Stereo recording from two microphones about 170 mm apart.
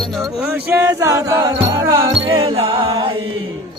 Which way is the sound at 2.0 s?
30° right (ahead or behind).